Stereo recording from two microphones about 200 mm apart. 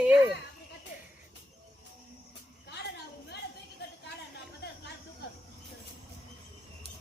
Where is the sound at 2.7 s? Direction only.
55° left (ahead or behind).